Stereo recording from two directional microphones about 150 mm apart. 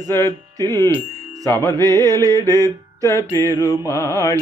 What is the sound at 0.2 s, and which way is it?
Music, 25° right (ahead or behind).